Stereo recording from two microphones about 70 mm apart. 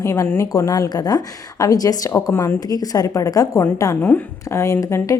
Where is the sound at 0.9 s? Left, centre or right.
Left.